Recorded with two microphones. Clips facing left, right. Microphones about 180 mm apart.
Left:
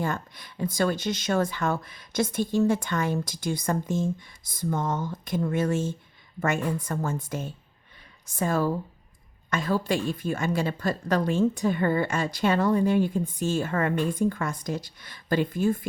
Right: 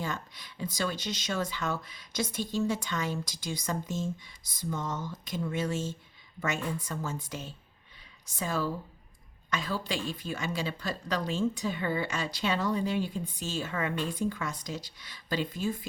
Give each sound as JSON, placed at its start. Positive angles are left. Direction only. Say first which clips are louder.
{"t": 0.0, "sound": "a woman's voice", "louder": "left 6 dB", "side_deg": 55}